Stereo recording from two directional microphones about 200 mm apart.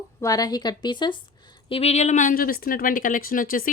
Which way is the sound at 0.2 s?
20° left (ahead or behind).